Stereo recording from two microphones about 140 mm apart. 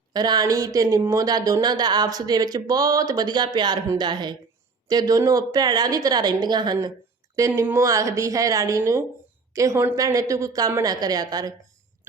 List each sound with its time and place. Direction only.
0.1 s a woman's voice: 30° right (ahead or behind)